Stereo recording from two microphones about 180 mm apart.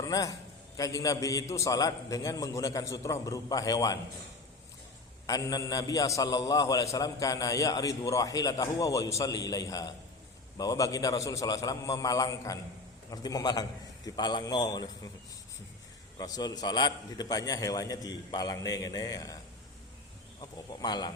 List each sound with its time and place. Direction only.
0.1 s a man's voice: 20° left (ahead or behind)
5.2 s a man's voice: 20° left (ahead or behind)
16.1 s a man's voice: 20° left (ahead or behind)
20.4 s a man's voice: 25° left (ahead or behind)